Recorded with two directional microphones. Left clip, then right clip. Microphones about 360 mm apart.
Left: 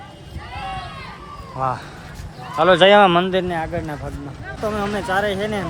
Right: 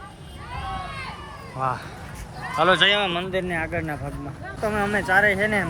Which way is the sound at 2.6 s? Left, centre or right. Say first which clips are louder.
Left 4 dB; centre.